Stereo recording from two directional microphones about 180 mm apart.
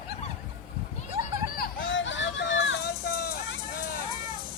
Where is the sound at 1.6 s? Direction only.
90° left; by 3.3 s 60° left (ahead or behind).